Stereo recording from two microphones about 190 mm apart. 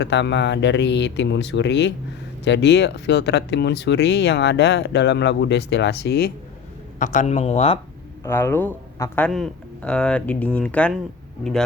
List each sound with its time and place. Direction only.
0.0 s speech: 70° left (ahead or behind)
7.0 s speech: 40° left (ahead or behind)
8.2 s speech: 10° left (ahead or behind)